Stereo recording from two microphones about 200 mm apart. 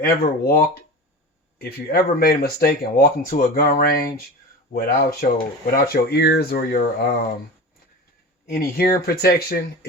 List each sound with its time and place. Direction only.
0.0 s speech: 50° left (ahead or behind)
8.4 s speech: 50° left (ahead or behind)